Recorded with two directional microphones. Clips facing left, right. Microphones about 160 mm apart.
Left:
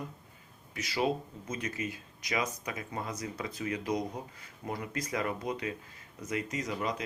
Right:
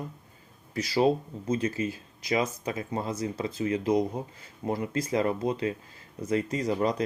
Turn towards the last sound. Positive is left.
turn(degrees=-35)  # may be behind; listen again after turning